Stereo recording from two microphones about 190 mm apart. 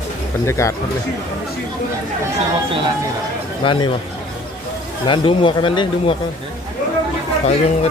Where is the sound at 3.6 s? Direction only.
25° left (ahead or behind).